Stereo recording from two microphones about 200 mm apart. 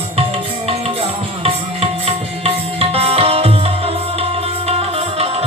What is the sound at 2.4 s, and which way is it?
Music, 30° right (ahead or behind).